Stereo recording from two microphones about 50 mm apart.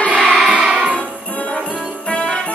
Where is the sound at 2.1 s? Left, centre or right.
Left.